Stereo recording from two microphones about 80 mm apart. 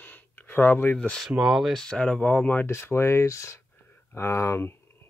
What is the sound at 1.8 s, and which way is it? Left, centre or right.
Speech, centre.